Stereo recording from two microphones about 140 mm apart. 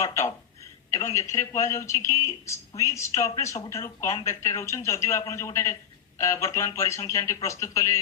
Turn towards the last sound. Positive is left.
turn(degrees=20)  # may be behind; listen again after turning